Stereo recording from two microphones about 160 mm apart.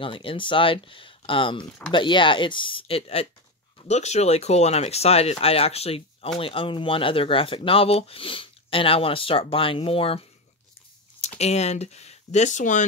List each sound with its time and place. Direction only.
0.0 s speech: 35° left (ahead or behind); by 12.8 s 50° left (ahead or behind)